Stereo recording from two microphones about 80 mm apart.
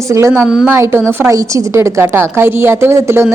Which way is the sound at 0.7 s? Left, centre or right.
Right.